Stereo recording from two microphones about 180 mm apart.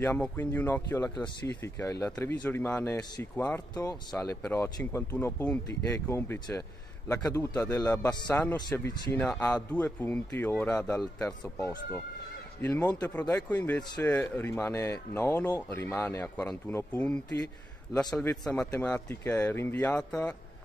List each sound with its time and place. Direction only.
0.0 s speech: 10° left (ahead or behind)
1.8 s speech: 15° left (ahead or behind)
3.7 s a man's voice: 20° left (ahead or behind)
5.1 s a man's voice: 5° left (ahead or behind)
9.1 s speech: 10° left (ahead or behind)
11.2 s speech: 15° left (ahead or behind)
18.4 s speech: 10° left (ahead or behind)